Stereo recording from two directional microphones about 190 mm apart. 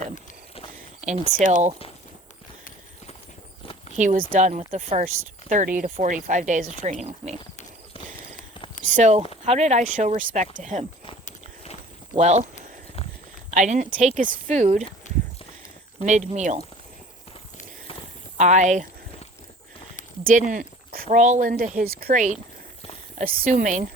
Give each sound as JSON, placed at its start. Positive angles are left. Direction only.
{"t": 1.0, "sound": "speech", "side_deg": -40}
{"t": 3.9, "sound": "speech", "side_deg": -40}
{"t": 8.9, "sound": "speech", "side_deg": -40}
{"t": 12.1, "sound": "speech", "side_deg": -35}
{"t": 13.5, "sound": "speech", "side_deg": -40}
{"t": 16.0, "sound": "speech", "side_deg": -35}
{"t": 18.3, "sound": "speech", "side_deg": -40}
{"t": 20.5, "sound": "speech", "side_deg": -50}